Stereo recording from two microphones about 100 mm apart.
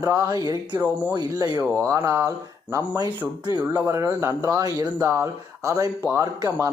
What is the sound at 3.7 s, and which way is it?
Speech, 30° right (ahead or behind).